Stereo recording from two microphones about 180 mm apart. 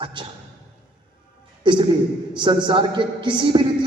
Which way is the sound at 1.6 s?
25° right (ahead or behind).